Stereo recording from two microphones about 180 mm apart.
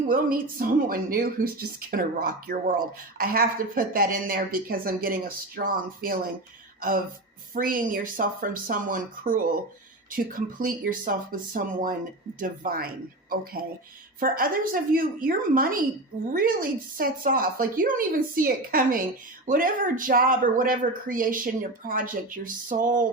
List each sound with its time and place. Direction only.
0.1 s speech: 55° right (ahead or behind)
7.5 s speech: 50° right (ahead or behind)